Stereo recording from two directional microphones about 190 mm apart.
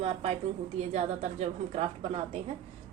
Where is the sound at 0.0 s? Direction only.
35° right (ahead or behind).